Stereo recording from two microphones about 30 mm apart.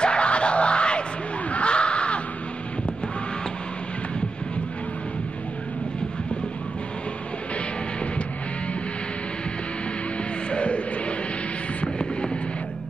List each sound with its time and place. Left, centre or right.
0.0 s music: left
1.5 s a sound: left
10.5 s music: left